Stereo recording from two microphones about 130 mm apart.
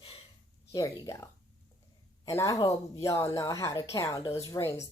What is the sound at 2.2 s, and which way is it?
Speech, 25° left (ahead or behind).